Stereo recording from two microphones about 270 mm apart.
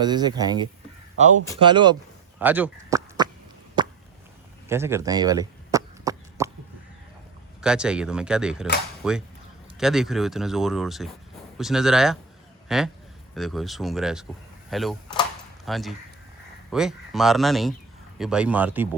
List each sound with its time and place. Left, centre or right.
0.0 s speech: centre
2.4 s a sound: centre
4.7 s cough: centre
7.6 s speech: centre